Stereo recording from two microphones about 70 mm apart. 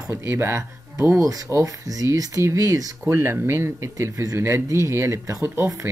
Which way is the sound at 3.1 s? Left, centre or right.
Right.